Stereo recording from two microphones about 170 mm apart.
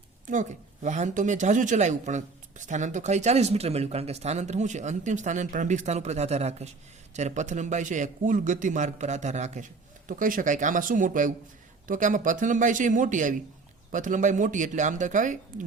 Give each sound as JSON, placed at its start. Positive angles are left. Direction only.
{"t": 0.3, "sound": "speech", "side_deg": -45}